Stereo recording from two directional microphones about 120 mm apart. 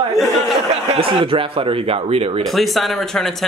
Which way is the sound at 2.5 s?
Centre (ahead or behind).